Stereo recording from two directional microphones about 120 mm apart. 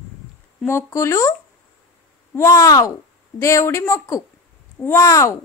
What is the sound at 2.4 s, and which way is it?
Speech, 30° left (ahead or behind).